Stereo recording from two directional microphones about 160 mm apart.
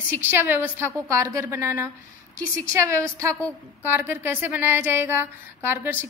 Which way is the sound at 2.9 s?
20° right (ahead or behind).